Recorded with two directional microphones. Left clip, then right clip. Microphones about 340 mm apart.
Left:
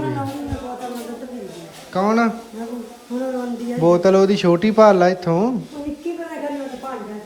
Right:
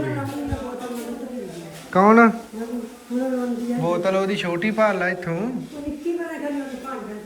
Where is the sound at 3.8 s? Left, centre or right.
Centre.